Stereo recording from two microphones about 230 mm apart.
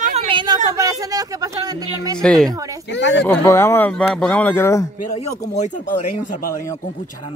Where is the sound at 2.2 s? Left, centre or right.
Centre.